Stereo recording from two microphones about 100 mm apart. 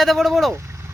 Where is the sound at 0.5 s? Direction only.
30° right (ahead or behind).